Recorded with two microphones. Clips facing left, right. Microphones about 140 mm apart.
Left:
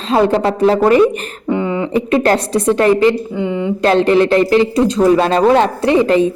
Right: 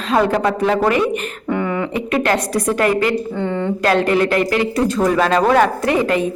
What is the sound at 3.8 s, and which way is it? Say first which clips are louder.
A woman's voice: left 5 dB; 30° left (ahead or behind).